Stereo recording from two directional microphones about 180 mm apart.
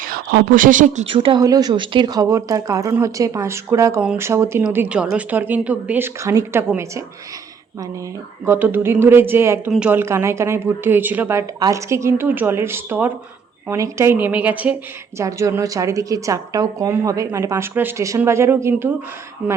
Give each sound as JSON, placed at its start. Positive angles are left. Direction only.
{"t": 0.1, "sound": "speech", "side_deg": -50}
{"t": 1.0, "sound": "a woman's voice", "side_deg": -30}
{"t": 8.4, "sound": "a woman's voice", "side_deg": -10}